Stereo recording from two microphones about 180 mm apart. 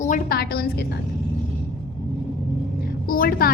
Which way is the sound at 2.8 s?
55° left (ahead or behind).